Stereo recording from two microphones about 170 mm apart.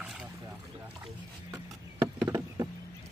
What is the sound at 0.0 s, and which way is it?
Boat, 5° right (ahead or behind).